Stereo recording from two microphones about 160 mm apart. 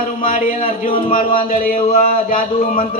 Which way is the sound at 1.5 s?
65° left (ahead or behind).